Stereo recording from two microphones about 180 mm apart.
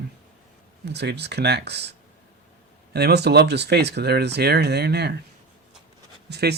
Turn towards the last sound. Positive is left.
turn(degrees=-65)  # may be behind; listen again after turning